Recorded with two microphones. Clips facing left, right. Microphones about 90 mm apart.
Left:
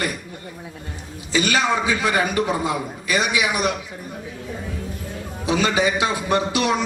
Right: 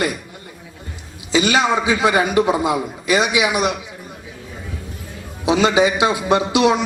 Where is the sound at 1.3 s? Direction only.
20° right (ahead or behind).